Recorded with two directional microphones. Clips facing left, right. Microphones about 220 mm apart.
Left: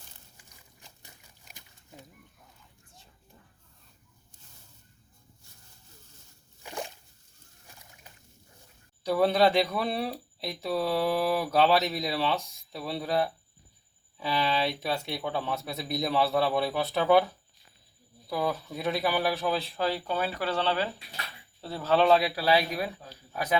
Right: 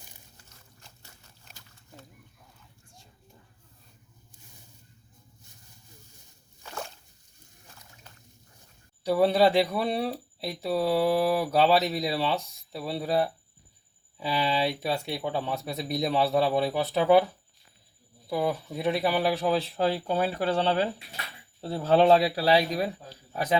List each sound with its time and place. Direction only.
0.3 s pig: 15° left (ahead or behind)
6.6 s a sound: 15° left (ahead or behind)
9.0 s speech: 5° right (ahead or behind)
18.3 s speech: 15° right (ahead or behind); by 23.6 s 30° right (ahead or behind)